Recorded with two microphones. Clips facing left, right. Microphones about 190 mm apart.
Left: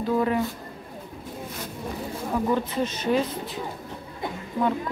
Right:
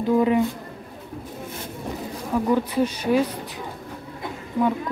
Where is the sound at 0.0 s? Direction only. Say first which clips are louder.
Right 4 dB; 15° right (ahead or behind).